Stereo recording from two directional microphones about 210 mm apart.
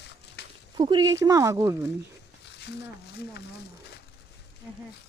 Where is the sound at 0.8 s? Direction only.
20° right (ahead or behind).